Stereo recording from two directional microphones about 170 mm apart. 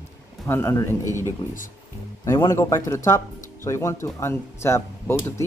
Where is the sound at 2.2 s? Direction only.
15° left (ahead or behind).